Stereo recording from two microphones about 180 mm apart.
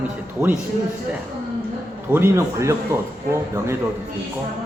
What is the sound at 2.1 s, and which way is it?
Speech, 15° right (ahead or behind).